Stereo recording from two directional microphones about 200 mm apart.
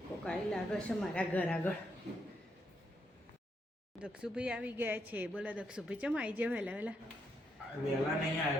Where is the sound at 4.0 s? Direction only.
5° right (ahead or behind).